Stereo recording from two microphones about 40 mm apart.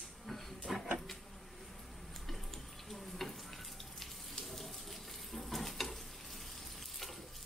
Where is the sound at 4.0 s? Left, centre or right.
Centre.